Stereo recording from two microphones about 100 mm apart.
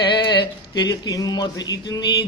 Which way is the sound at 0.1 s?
50° left (ahead or behind).